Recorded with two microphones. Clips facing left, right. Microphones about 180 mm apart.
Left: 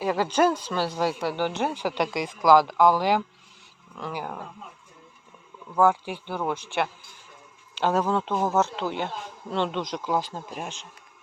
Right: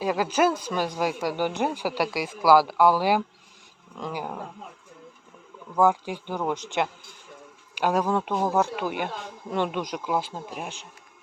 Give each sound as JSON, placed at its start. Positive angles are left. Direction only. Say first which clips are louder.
{"t": 0.0, "sound": "speech", "louder": "even", "side_deg": -10}
{"t": 5.7, "sound": "speech", "louder": "even", "side_deg": -15}